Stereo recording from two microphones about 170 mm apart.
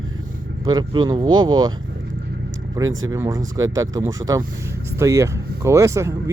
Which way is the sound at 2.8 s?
20° right (ahead or behind).